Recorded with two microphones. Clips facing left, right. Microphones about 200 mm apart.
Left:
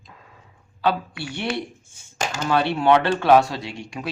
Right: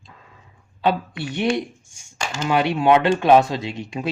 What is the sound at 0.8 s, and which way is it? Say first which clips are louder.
Speech: right 2 dB; 20° right (ahead or behind).